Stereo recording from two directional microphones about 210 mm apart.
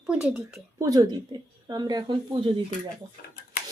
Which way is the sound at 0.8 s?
15° right (ahead or behind).